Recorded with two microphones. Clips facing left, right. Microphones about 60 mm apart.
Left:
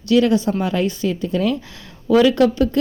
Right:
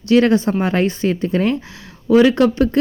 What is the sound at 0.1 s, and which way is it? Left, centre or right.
Speech, right.